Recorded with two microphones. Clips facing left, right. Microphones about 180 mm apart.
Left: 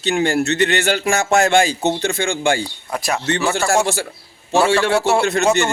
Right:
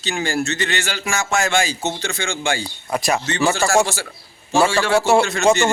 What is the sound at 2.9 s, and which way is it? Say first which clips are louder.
Speech: right 3 dB; centre (ahead or behind).